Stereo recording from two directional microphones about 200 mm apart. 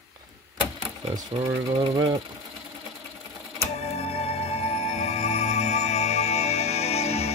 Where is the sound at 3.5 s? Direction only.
30° left (ahead or behind).